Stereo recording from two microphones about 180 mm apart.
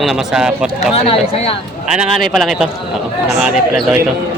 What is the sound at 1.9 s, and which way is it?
Speech, centre (ahead or behind).